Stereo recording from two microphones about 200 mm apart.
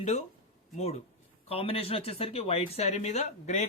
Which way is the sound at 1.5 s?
30° left (ahead or behind).